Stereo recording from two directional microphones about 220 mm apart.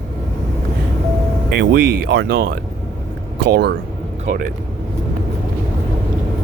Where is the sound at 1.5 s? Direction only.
45° right (ahead or behind).